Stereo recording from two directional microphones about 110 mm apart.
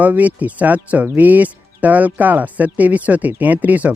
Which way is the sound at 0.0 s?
15° right (ahead or behind).